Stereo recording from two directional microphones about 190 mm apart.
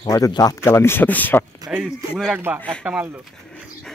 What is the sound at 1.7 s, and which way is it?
Speech, 5° right (ahead or behind).